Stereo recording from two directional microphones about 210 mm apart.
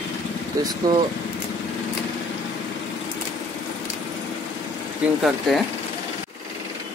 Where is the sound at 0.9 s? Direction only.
20° right (ahead or behind).